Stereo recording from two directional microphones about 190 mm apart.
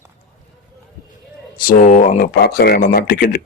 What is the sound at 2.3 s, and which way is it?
Speech, 55° left (ahead or behind).